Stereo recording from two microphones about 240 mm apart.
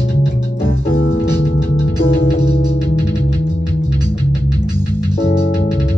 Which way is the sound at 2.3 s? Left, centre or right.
Left.